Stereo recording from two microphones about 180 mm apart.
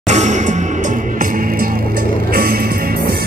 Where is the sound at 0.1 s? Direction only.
40° right (ahead or behind).